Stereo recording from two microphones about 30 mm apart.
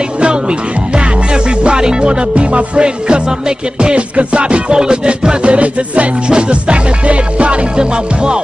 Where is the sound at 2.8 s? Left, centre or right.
Right.